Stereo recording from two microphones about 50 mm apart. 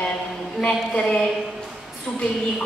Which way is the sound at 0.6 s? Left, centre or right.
Centre.